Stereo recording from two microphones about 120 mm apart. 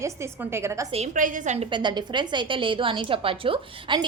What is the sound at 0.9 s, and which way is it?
Speech, 75° right (ahead or behind).